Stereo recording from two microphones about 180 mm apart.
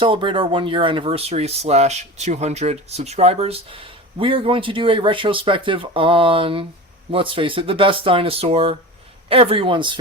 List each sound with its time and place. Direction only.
0.0 s speech: 30° right (ahead or behind)